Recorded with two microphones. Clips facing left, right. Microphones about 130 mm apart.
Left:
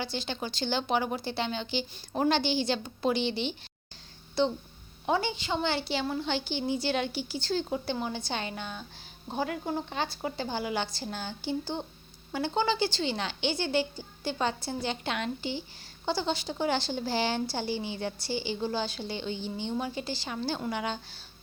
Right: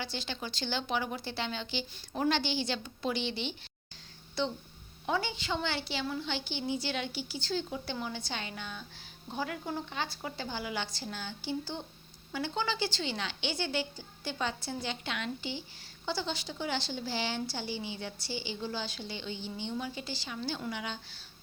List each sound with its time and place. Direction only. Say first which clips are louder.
0.0 s a woman's voice: left 4 dB; 25° left (ahead or behind)
5.0 s a woman's voice: left 4 dB; 25° left (ahead or behind)
5.9 s a woman's voice: left 5 dB; 40° left (ahead or behind)
7.9 s a woman's voice: left 5 dB; 30° left (ahead or behind); by 21.0 s 45° left (ahead or behind)